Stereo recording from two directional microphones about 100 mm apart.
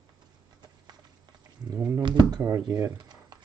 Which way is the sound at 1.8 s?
25° right (ahead or behind).